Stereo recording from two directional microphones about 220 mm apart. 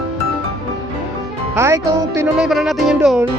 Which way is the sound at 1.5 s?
10° right (ahead or behind).